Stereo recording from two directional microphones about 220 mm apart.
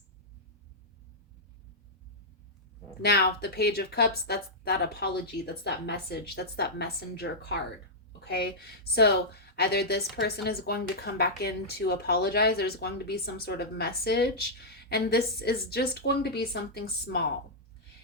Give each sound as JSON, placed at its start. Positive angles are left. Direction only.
{"t": 3.0, "sound": "a woman's voice", "side_deg": 45}